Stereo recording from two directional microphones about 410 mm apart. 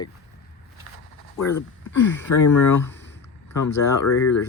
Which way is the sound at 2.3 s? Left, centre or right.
Left.